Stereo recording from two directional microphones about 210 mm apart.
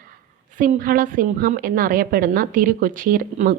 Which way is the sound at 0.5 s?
40° right (ahead or behind).